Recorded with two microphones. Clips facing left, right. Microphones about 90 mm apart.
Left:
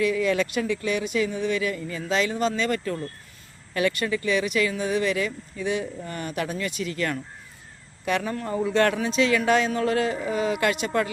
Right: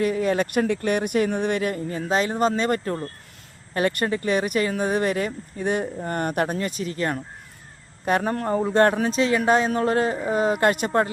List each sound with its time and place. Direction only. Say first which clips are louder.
0.0 s speech: right 1 dB; 45° right (ahead or behind)